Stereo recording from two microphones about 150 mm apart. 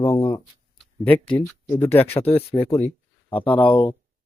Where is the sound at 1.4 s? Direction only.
10° left (ahead or behind).